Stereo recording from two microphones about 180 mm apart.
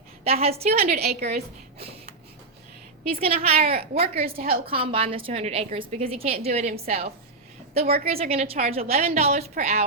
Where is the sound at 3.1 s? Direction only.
35° right (ahead or behind).